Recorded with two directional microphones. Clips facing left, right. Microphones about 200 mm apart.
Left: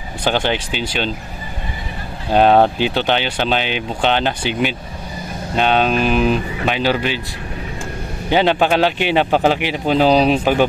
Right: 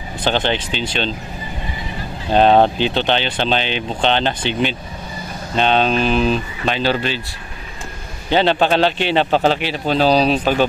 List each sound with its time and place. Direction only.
0.2 s speech: 10° left (ahead or behind)
2.3 s speech: 10° left (ahead or behind)
8.3 s speech: 10° left (ahead or behind)